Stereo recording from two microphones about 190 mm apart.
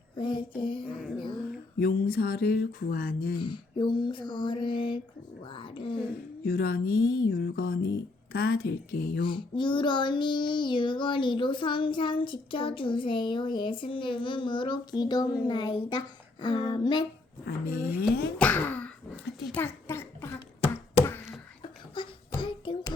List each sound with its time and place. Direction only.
0.6 s child singing: 25° left (ahead or behind)
1.8 s speech: 55° left (ahead or behind)
3.3 s child singing: 25° left (ahead or behind)
6.4 s speech: 50° left (ahead or behind)
7.3 s music: 55° left (ahead or behind)
8.3 s speech: 55° left (ahead or behind)
9.2 s child singing: 25° left (ahead or behind)
17.4 s music: 55° left (ahead or behind)
17.8 s speech: 10° right (ahead or behind)
18.3 s speech: 10° left (ahead or behind)
19.5 s a sound: 10° left (ahead or behind)
22.0 s a sound: 25° left (ahead or behind)